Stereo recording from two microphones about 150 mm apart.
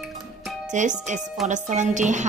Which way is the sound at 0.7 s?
55° right (ahead or behind).